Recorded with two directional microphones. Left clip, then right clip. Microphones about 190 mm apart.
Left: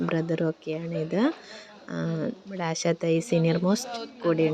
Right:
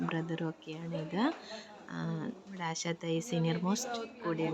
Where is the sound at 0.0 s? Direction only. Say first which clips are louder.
Left 10 dB; 25° left (ahead or behind).